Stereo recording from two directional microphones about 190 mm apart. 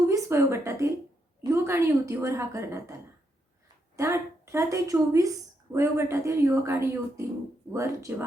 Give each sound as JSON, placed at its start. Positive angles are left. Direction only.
{"t": 0.1, "sound": "speech", "side_deg": -15}
{"t": 3.9, "sound": "speech", "side_deg": -15}